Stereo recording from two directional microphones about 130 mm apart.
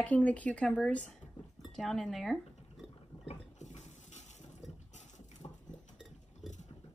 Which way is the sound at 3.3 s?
65° left (ahead or behind).